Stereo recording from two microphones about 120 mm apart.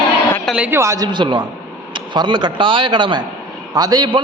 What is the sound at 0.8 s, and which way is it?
A man's voice, 30° right (ahead or behind).